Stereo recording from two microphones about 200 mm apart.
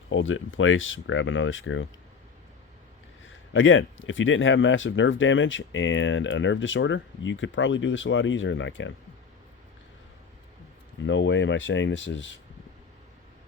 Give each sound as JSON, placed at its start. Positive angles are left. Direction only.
{"t": 0.1, "sound": "speech", "side_deg": 75}
{"t": 3.5, "sound": "speech", "side_deg": 75}
{"t": 11.0, "sound": "speech", "side_deg": 65}